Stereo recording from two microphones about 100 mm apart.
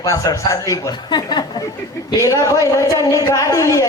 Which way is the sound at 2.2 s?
35° left (ahead or behind).